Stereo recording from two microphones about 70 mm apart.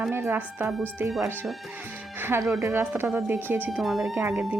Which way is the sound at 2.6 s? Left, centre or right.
Right.